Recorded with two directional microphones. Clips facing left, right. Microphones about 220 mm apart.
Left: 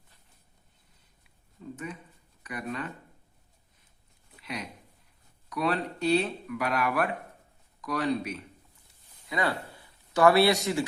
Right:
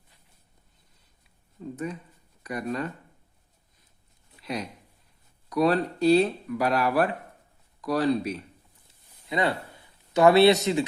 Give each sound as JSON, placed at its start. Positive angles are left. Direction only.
{"t": 1.6, "sound": "speech", "side_deg": -40}
{"t": 5.5, "sound": "speech", "side_deg": -40}
{"t": 9.3, "sound": "speech", "side_deg": -25}